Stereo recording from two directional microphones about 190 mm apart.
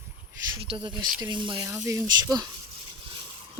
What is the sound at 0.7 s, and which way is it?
Speech, 25° right (ahead or behind).